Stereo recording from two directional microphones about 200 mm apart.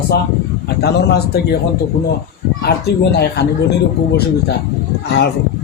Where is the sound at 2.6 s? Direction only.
55° left (ahead or behind).